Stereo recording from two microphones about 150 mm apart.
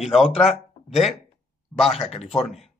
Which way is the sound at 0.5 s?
Centre (ahead or behind).